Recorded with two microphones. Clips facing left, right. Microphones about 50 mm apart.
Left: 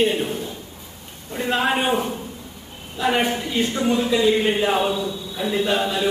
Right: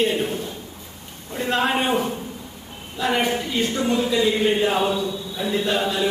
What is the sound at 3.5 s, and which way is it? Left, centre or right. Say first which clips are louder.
A man's voice: left 2 dB; centre.